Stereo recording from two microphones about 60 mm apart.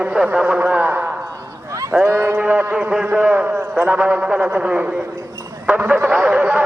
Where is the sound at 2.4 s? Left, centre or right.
Right.